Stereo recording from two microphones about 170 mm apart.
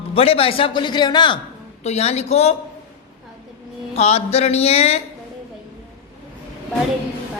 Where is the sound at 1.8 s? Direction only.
40° left (ahead or behind).